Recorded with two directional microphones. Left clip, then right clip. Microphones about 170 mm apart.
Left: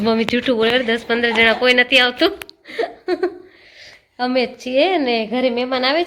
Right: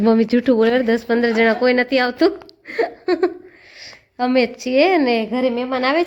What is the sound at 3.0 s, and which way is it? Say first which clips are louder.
Laughter: right 2 dB; 15° right (ahead or behind).